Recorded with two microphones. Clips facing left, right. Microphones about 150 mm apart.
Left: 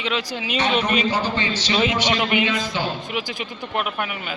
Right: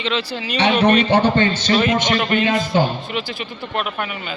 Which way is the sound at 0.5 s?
70° right (ahead or behind).